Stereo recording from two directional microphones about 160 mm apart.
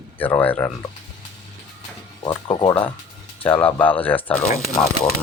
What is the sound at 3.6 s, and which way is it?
Speech, 10° left (ahead or behind).